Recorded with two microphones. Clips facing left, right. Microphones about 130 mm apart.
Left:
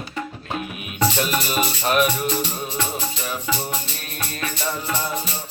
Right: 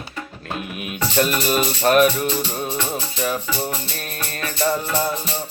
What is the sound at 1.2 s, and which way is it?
Mantra, 45° right (ahead or behind).